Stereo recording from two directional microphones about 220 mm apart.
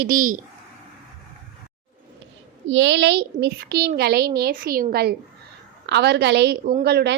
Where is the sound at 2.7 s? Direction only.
55° right (ahead or behind).